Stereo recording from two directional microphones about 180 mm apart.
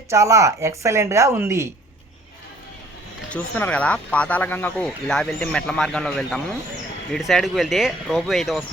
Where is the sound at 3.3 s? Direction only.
10° left (ahead or behind).